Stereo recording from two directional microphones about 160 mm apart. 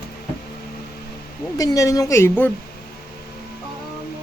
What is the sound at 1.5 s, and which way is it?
Speech, 20° left (ahead or behind).